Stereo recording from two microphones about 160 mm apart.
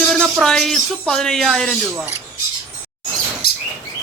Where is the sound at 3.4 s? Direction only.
80° left.